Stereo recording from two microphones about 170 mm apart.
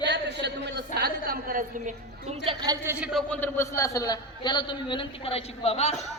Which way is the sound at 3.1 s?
10° left (ahead or behind).